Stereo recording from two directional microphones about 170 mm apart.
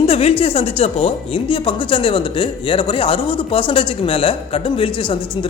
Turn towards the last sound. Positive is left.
turn(degrees=30)  # may be behind; listen again after turning